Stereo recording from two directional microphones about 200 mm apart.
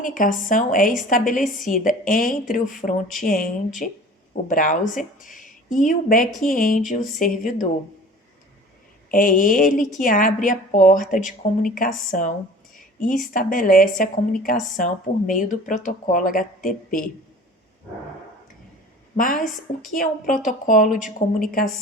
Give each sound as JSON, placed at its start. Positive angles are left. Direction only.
{"t": 0.0, "sound": "speech", "side_deg": 40}
{"t": 2.8, "sound": "speech", "side_deg": 25}
{"t": 3.2, "sound": "a woman's voice", "side_deg": 45}
{"t": 9.0, "sound": "a woman's voice", "side_deg": 40}
{"t": 19.1, "sound": "a woman's voice", "side_deg": 45}